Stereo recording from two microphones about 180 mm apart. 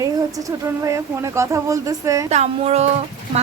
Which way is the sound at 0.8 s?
15° right (ahead or behind).